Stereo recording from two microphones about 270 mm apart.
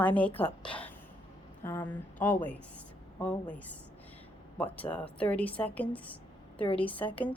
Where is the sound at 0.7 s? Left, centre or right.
Centre.